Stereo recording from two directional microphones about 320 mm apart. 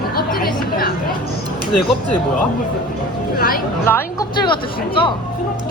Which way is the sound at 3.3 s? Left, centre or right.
Left.